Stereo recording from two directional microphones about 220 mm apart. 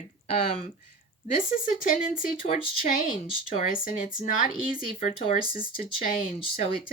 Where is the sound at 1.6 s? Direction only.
35° left (ahead or behind).